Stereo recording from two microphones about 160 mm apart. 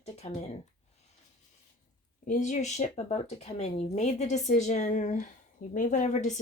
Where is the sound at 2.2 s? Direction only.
50° left (ahead or behind).